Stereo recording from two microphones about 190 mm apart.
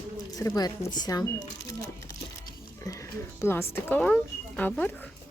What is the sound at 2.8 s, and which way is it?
Speech, 15° left (ahead or behind).